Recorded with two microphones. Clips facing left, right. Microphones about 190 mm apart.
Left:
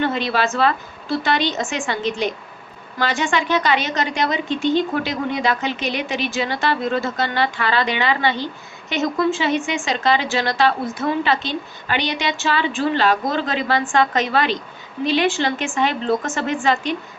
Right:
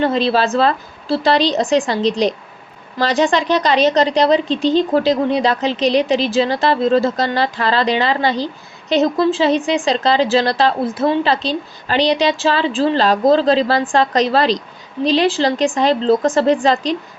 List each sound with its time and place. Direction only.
0.0 s a woman's voice: 30° right (ahead or behind)